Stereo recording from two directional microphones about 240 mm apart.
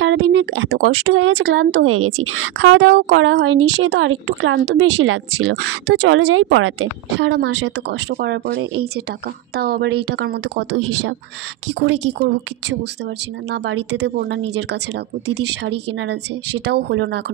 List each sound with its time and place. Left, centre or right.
0.0 s speech: right